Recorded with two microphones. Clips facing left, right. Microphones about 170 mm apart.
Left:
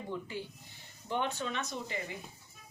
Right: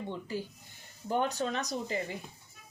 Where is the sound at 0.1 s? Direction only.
40° right (ahead or behind).